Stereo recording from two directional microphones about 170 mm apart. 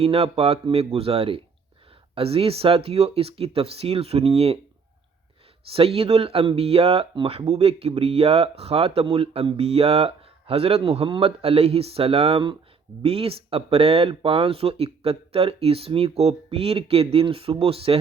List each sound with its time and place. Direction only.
0.0 s speech: 35° right (ahead or behind)
5.7 s speech: 35° right (ahead or behind)